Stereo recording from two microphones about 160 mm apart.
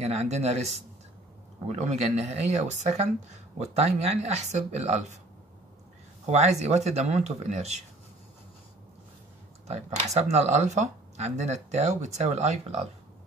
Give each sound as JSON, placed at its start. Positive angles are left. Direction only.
{"t": 0.0, "sound": "speech", "side_deg": -40}
{"t": 6.2, "sound": "speech", "side_deg": -40}
{"t": 9.7, "sound": "speech", "side_deg": -45}